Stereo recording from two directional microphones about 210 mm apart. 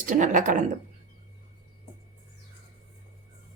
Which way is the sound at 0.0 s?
40° right (ahead or behind).